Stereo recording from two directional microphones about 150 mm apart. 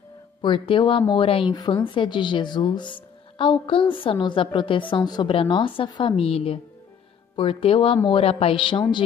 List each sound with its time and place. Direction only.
0.4 s speech: 35° left (ahead or behind)